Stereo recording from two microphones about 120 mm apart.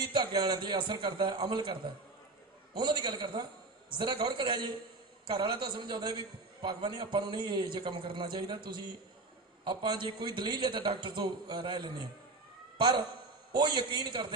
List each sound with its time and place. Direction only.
0.0 s a man's voice: 40° right (ahead or behind)
9.7 s a man's voice: 40° right (ahead or behind)
13.5 s a man's voice: 35° right (ahead or behind)